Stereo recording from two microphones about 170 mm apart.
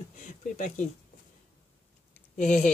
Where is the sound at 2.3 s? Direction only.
45° left (ahead or behind).